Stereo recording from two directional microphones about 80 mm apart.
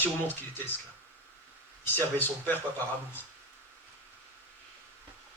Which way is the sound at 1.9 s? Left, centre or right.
Left.